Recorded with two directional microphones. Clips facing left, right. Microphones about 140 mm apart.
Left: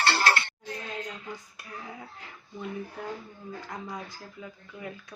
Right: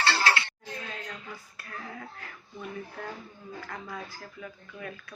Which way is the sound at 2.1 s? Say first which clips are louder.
Left 1 dB; 20° left (ahead or behind).